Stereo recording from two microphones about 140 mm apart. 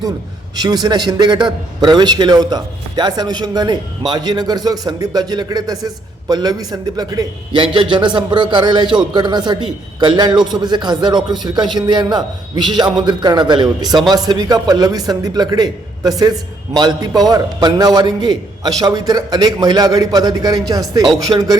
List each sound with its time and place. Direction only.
0.5 s a man's voice: 30° right (ahead or behind)